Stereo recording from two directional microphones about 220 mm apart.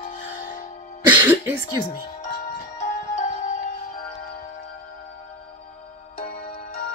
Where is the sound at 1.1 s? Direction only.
10° right (ahead or behind).